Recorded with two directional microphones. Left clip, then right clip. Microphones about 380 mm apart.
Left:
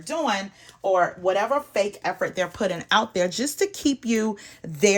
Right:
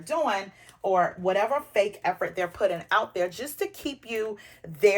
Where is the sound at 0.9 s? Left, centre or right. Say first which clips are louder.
Left 2 dB; left.